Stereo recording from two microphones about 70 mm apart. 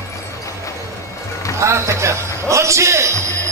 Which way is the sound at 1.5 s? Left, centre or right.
Right.